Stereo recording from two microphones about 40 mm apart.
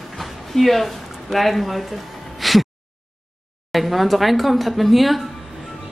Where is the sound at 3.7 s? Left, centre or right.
Centre.